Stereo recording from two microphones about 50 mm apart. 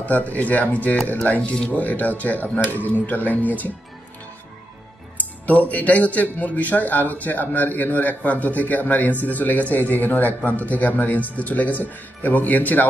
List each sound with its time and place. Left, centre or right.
0.0 s a man's voice: left
5.5 s a man's voice: left